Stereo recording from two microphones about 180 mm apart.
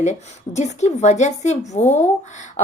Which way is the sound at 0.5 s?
40° left (ahead or behind).